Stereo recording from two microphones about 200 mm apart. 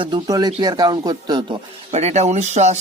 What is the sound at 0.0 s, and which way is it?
Speech, 20° right (ahead or behind).